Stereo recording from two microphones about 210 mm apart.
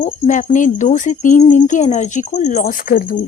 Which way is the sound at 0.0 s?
40° left (ahead or behind).